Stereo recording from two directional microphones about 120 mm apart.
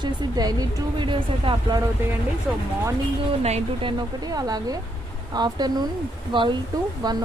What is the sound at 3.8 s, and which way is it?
A woman's voice, 35° right (ahead or behind).